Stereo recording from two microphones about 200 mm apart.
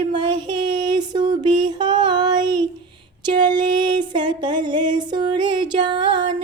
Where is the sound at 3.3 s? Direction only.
20° right (ahead or behind).